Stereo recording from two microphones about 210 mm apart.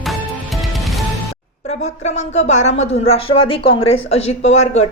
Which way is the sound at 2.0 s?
30° left (ahead or behind).